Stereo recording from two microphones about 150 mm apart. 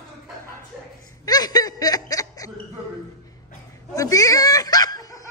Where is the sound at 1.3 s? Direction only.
25° left (ahead or behind).